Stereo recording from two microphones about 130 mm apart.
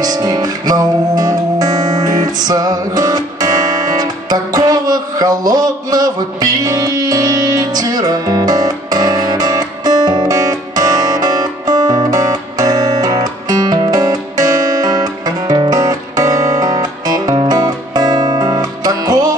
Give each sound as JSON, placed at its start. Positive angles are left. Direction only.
{"t": 0.0, "sound": "music", "side_deg": -30}